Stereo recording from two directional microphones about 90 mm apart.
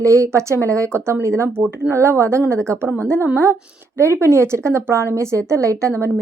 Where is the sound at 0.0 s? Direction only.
35° right (ahead or behind).